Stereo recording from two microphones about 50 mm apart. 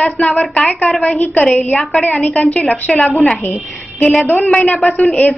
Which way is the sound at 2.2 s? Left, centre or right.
Left.